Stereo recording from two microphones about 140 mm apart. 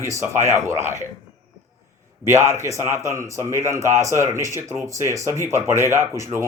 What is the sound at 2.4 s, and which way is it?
A man's voice, 20° right (ahead or behind).